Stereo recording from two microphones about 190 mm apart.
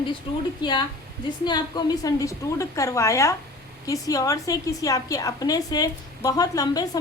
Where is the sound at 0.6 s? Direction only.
25° left (ahead or behind).